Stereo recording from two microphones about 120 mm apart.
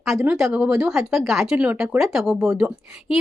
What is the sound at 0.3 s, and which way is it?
Speech, 5° right (ahead or behind).